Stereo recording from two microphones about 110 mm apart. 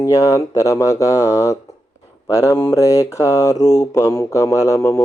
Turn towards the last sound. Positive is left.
turn(degrees=25)  # may be behind; listen again after turning